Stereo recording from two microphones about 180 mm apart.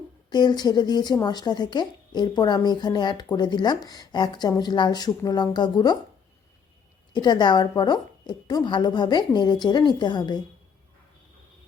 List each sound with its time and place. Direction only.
0.3 s speech: 25° left (ahead or behind)
7.1 s speech: 25° left (ahead or behind)